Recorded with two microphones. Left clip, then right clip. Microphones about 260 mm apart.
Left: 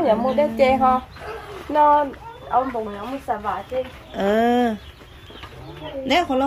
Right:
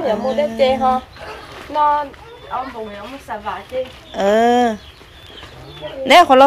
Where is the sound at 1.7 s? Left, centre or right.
Left.